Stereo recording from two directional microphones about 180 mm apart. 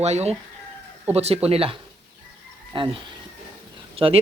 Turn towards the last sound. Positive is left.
turn(degrees=-30)  # may be behind; listen again after turning